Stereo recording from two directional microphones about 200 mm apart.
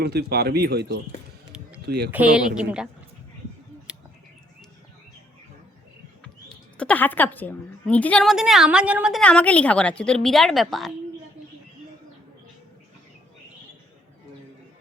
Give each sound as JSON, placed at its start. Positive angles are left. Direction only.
{"t": 0.0, "sound": "speech", "side_deg": -50}
{"t": 2.0, "sound": "speech", "side_deg": -5}
{"t": 6.2, "sound": "speech", "side_deg": 5}